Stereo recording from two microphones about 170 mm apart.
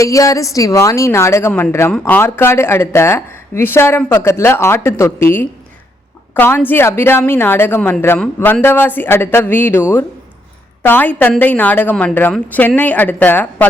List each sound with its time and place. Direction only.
0.0 s speech: 20° left (ahead or behind)
10.8 s speech: 10° left (ahead or behind)